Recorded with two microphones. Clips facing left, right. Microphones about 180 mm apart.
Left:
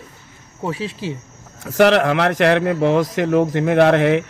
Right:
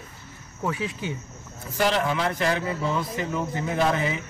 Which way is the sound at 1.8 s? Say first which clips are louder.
Left 10 dB; 75° left (ahead or behind).